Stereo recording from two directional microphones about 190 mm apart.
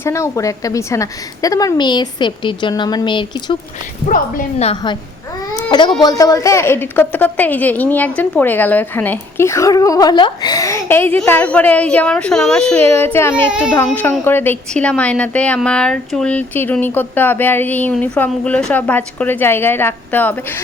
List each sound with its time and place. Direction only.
0.0 s a woman's voice: 15° left (ahead or behind)
4.6 s a woman's voice: 25° left (ahead or behind)
6.0 s a woman's voice: 20° left (ahead or behind)
13.5 s speech: 5° right (ahead or behind)
13.8 s a woman's voice: 10° left (ahead or behind)